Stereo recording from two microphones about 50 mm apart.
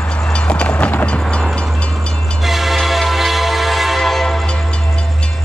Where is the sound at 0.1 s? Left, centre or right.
Left.